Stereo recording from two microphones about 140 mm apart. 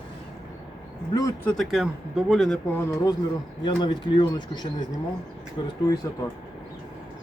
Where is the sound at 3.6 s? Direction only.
30° left (ahead or behind).